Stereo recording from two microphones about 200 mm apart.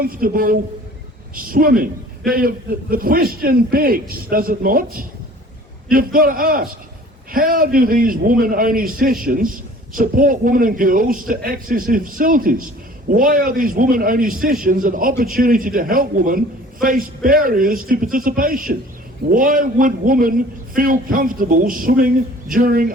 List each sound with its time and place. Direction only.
0.0 s a man's voice: 45° right (ahead or behind)